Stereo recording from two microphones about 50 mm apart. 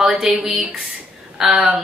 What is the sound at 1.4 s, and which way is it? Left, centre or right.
Speech, right.